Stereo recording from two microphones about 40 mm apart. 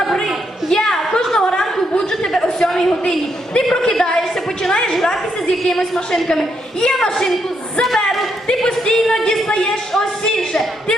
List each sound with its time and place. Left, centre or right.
0.0 s a sound: centre
0.7 s chuckle: centre
3.1 s a woman's voice: centre
7.8 s a woman's voice: centre